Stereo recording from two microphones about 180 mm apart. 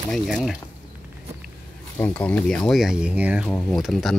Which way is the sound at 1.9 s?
10° left (ahead or behind).